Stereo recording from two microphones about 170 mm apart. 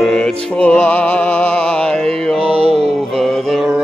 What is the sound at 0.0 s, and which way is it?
Music, 5° left (ahead or behind).